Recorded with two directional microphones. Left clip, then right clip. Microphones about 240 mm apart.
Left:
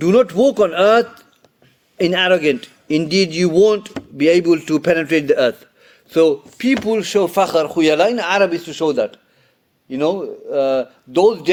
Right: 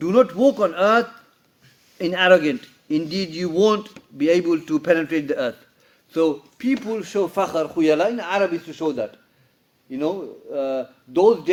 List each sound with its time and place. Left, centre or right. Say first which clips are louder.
0.0 s speech: left 3 dB; left